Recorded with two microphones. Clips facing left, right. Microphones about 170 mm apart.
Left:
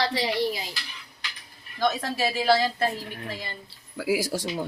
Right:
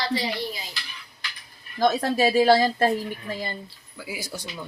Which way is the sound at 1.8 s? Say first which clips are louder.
Right 5 dB; 45° right (ahead or behind).